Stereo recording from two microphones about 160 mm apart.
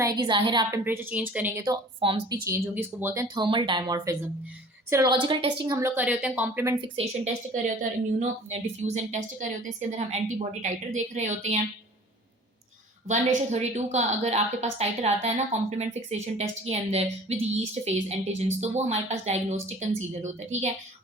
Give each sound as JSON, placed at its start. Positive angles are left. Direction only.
{"t": 0.2, "sound": "speech", "side_deg": -30}
{"t": 0.9, "sound": "a woman's voice", "side_deg": -10}
{"t": 2.0, "sound": "a woman's voice", "side_deg": -35}
{"t": 2.4, "sound": "a woman's voice", "side_deg": -15}
{"t": 3.3, "sound": "speech", "side_deg": -30}
{"t": 5.2, "sound": "a woman's voice", "side_deg": -30}
{"t": 5.7, "sound": "a woman's voice", "side_deg": -15}
{"t": 6.8, "sound": "a woman's voice", "side_deg": -40}
{"t": 7.5, "sound": "a woman's voice", "side_deg": -50}
{"t": 13.1, "sound": "a woman's voice", "side_deg": -45}